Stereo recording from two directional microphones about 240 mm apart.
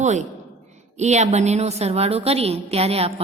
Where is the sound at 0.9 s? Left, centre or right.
Right.